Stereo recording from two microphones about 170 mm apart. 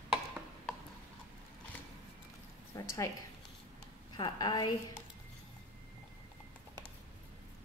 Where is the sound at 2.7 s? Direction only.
20° left (ahead or behind).